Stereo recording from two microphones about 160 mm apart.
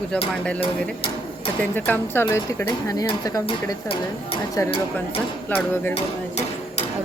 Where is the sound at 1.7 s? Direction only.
15° left (ahead or behind).